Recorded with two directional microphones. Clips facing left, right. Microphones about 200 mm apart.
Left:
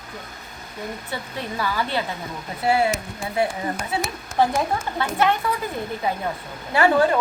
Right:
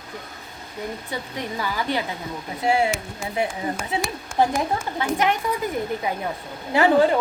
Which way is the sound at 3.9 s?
15° right (ahead or behind).